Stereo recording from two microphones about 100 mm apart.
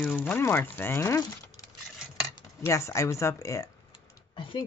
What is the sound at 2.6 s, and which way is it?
Speech, 30° left (ahead or behind).